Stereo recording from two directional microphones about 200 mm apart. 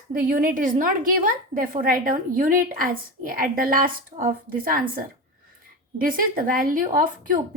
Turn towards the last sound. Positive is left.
turn(degrees=-45)  # may be behind; listen again after turning